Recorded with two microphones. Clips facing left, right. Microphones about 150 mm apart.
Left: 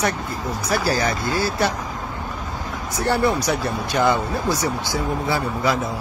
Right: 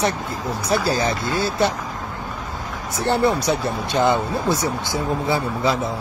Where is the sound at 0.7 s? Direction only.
20° right (ahead or behind).